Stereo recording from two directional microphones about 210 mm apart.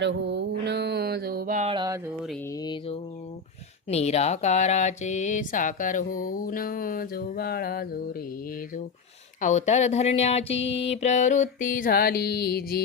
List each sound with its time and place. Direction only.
0.0 s mantra: 60° right (ahead or behind); by 1.7 s 35° right (ahead or behind)
1.7 s music: 20° right (ahead or behind)
2.6 s mantra: 25° left (ahead or behind)
3.8 s speech: 30° left (ahead or behind); by 7.9 s 45° left (ahead or behind)
9.4 s speech: 35° left (ahead or behind)
10.9 s music: 35° left (ahead or behind)